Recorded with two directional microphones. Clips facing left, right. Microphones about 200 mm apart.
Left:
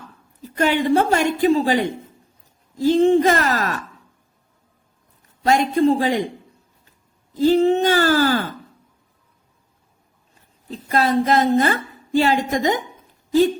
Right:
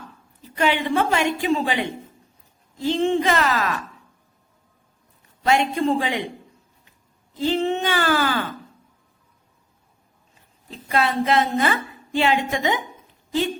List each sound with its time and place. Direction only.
0.5 s a woman's voice: 45° left (ahead or behind)
5.4 s a woman's voice: 40° left (ahead or behind)
7.3 s a woman's voice: 40° left (ahead or behind)
10.7 s a woman's voice: 40° left (ahead or behind)